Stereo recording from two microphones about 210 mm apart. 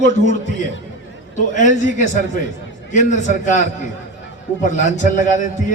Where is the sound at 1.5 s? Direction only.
35° left (ahead or behind).